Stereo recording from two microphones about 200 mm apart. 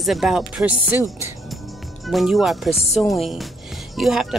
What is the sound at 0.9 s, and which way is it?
Speech, 15° left (ahead or behind).